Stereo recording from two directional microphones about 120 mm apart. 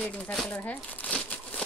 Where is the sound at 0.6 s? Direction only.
15° left (ahead or behind).